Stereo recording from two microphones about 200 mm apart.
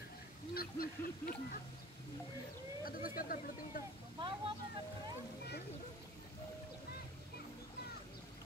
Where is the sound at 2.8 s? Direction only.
45° left (ahead or behind).